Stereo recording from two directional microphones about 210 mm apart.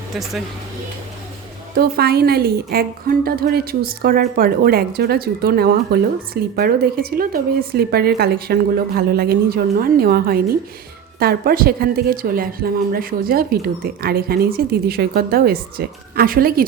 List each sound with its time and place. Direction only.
0.1 s speech: centre (ahead or behind)
1.7 s a woman's voice: 50° right (ahead or behind)